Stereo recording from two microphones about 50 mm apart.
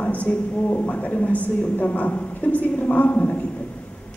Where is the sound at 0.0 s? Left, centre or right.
Left.